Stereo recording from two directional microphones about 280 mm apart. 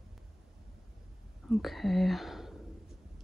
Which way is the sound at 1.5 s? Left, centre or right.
Centre.